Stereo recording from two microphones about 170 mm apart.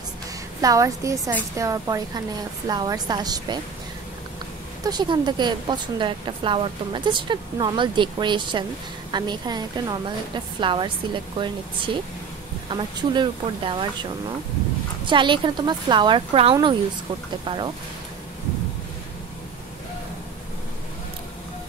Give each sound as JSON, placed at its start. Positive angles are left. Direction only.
{"t": 0.6, "sound": "a woman's voice", "side_deg": -20}
{"t": 4.8, "sound": "a woman's voice", "side_deg": -25}
{"t": 15.0, "sound": "a woman's voice", "side_deg": -30}